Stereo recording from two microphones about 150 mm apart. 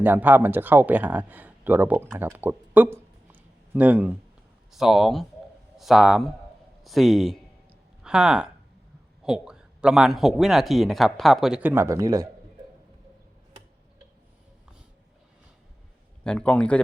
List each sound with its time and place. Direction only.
0.0 s a man's voice: 10° right (ahead or behind)
11.7 s speech: 20° right (ahead or behind)
16.2 s a man's voice: 5° left (ahead or behind)